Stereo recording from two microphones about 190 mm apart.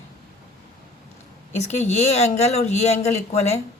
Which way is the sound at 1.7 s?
35° left (ahead or behind).